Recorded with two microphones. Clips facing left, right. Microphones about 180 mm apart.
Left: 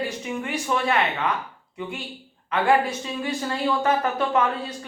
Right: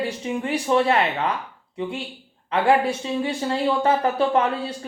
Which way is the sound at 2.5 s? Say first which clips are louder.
Right 2 dB; 30° right (ahead or behind).